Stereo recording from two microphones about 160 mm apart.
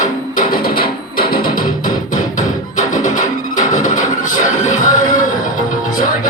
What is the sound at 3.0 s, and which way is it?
Music, 55° left (ahead or behind).